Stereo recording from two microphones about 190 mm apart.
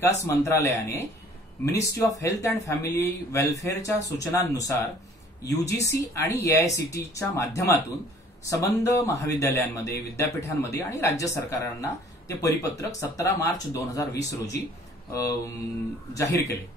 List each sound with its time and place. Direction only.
0.0 s a man's voice: 15° left (ahead or behind)